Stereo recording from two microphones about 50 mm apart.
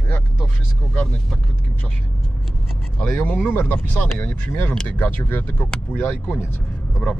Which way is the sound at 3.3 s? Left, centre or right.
Left.